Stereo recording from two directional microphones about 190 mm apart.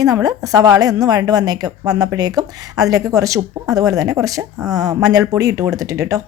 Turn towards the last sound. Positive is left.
turn(degrees=-15)  # may be behind; listen again after turning